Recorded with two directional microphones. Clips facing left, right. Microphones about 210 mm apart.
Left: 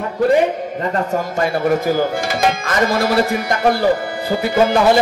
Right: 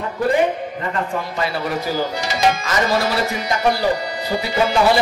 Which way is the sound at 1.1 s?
50° left (ahead or behind).